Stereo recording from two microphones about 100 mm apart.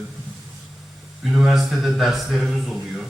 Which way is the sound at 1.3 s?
Centre (ahead or behind).